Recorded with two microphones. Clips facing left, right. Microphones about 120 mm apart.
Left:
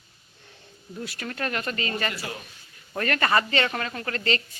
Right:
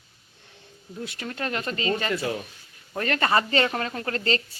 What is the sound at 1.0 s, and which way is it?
A woman's voice, 20° right (ahead or behind).